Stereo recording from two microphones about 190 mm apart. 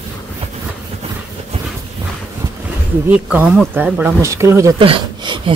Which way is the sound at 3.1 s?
5° right (ahead or behind).